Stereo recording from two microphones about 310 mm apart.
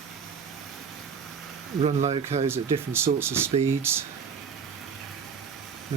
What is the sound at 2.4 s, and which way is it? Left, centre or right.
Speech, centre.